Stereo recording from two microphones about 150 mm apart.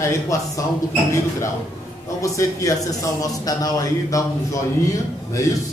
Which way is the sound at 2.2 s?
20° left (ahead or behind).